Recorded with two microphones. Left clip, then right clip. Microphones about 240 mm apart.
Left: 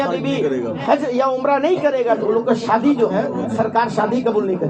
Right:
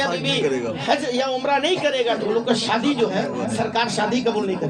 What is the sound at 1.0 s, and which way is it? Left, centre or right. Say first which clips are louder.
A woman's voice: left 4 dB; right.